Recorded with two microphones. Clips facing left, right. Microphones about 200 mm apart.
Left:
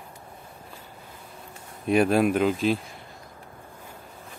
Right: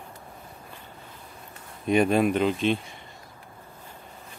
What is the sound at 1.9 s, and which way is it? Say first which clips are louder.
Speech: left 1 dB; 5° left (ahead or behind).